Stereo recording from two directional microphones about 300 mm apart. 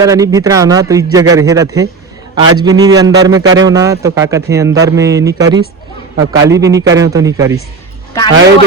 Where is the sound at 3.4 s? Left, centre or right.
Right.